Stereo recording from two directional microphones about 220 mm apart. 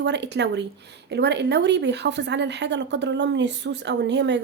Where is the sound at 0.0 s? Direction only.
50° right (ahead or behind).